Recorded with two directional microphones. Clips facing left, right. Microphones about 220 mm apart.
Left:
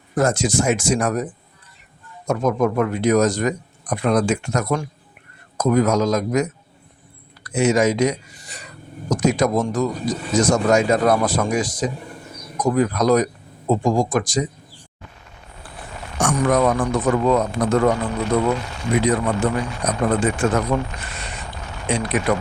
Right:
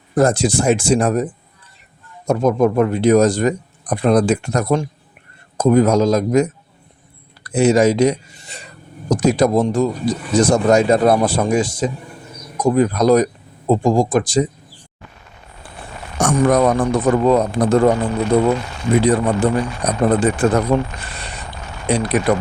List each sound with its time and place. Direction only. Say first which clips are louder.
0.1 s a man's voice: right 4 dB; 35° right (ahead or behind)
16.1 s a man's voice: right 4 dB; 40° right (ahead or behind)
21.8 s a man's voice: right 4 dB; 35° right (ahead or behind)